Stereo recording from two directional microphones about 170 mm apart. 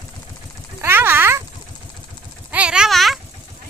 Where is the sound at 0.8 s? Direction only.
15° right (ahead or behind).